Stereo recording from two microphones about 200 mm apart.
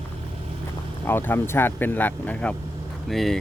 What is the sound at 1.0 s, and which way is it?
Speech, 10° left (ahead or behind).